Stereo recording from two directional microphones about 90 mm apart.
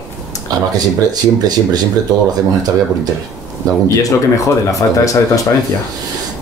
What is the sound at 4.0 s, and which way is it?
Speech, 40° left (ahead or behind).